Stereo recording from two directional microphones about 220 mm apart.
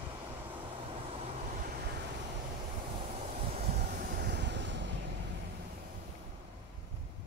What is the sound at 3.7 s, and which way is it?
Vehicle, 40° right (ahead or behind).